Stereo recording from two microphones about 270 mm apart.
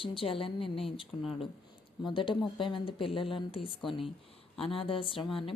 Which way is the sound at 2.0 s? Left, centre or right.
Centre.